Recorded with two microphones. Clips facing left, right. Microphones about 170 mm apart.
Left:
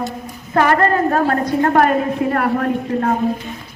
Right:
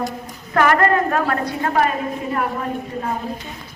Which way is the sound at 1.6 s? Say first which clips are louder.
Left 6 dB; 50° left (ahead or behind).